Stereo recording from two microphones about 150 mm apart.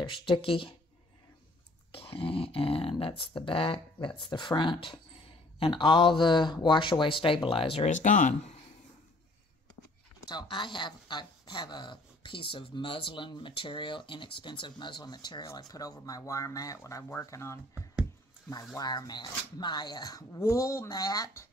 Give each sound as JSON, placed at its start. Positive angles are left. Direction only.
{"t": 0.1, "sound": "speech", "side_deg": 35}
{"t": 1.9, "sound": "speech", "side_deg": 35}
{"t": 7.9, "sound": "speech", "side_deg": 55}
{"t": 10.2, "sound": "speech", "side_deg": 30}
{"t": 18.8, "sound": "speech", "side_deg": 25}